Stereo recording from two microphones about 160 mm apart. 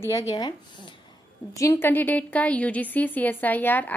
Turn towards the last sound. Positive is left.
turn(degrees=10)  # may be behind; listen again after turning